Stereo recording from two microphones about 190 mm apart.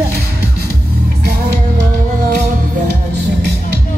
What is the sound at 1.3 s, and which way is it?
Music, 60° right (ahead or behind).